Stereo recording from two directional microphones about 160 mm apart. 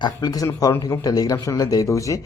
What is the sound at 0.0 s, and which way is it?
Speech, 25° left (ahead or behind).